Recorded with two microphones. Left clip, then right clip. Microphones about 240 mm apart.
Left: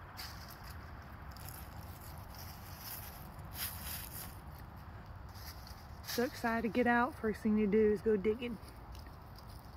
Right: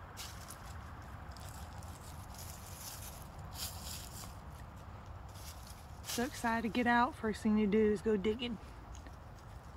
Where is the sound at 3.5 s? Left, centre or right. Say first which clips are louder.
Left 1 dB; centre.